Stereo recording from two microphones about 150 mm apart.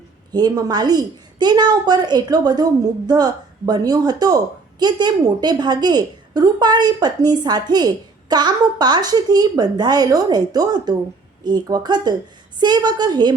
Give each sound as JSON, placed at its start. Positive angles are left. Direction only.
{"t": 0.3, "sound": "a woman's voice", "side_deg": -25}